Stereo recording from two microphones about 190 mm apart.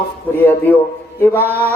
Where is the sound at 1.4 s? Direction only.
10° right (ahead or behind).